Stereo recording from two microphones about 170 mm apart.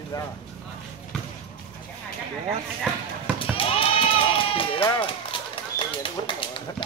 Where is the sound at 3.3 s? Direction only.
30° left (ahead or behind).